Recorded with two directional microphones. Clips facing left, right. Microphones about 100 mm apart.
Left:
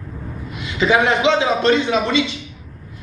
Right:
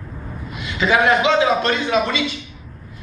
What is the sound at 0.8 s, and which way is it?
A woman's voice, 25° left (ahead or behind).